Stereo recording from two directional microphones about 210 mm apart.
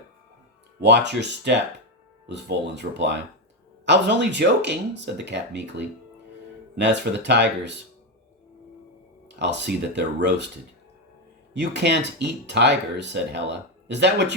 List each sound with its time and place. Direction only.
0.8 s speech: 55° right (ahead or behind)
9.3 s speech: 55° right (ahead or behind)
11.5 s speech: 55° right (ahead or behind)